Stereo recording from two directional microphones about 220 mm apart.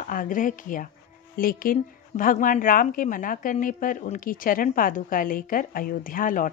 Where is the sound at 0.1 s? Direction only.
40° left (ahead or behind).